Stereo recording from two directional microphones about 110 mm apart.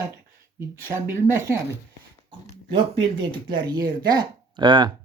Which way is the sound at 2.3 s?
50° right (ahead or behind).